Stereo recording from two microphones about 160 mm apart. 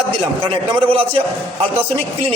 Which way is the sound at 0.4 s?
30° right (ahead or behind).